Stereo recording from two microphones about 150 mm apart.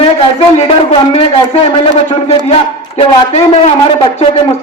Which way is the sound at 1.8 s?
45° left (ahead or behind).